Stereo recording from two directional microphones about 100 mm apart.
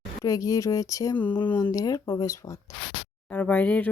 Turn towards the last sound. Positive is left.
turn(degrees=15)  # may be behind; listen again after turning